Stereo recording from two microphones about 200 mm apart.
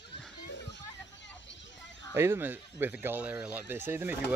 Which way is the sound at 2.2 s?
10° right (ahead or behind).